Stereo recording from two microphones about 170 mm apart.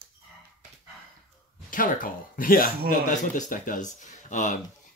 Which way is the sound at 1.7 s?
55° left (ahead or behind).